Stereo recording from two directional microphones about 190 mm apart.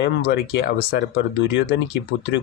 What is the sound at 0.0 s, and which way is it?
Speech, 65° left (ahead or behind).